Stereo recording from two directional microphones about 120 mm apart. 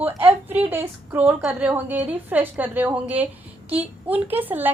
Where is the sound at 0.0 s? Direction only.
15° right (ahead or behind).